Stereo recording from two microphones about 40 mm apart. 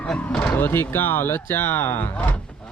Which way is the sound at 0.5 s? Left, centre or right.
Left.